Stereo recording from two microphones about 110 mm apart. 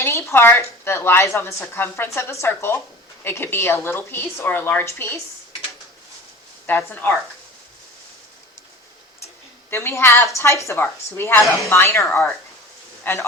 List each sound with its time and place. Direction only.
0.0 s a woman's voice: 25° left (ahead or behind)
6.7 s a woman's voice: 20° left (ahead or behind)
9.6 s a woman's voice: 25° left (ahead or behind)